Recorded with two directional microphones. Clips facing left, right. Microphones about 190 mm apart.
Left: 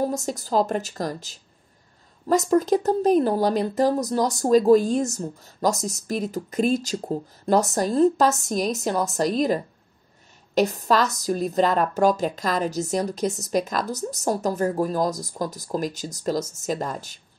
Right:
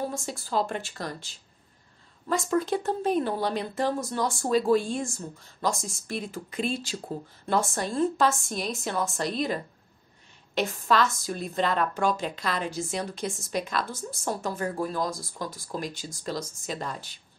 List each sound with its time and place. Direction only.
0.0 s speech: 40° left (ahead or behind)